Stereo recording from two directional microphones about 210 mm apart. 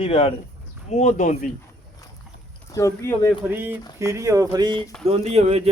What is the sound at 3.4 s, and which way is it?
A man's voice, 10° right (ahead or behind).